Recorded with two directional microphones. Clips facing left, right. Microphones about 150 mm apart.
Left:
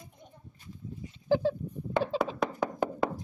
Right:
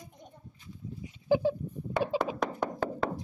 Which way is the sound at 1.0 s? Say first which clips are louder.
Even; 15° right (ahead or behind).